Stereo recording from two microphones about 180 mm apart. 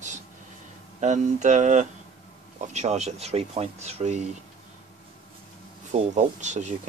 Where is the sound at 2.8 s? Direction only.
40° right (ahead or behind).